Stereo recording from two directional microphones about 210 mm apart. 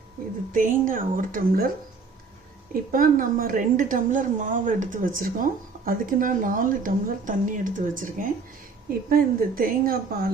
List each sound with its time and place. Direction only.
0.5 s a woman's voice: 40° right (ahead or behind)
2.9 s a woman's voice: 40° right (ahead or behind)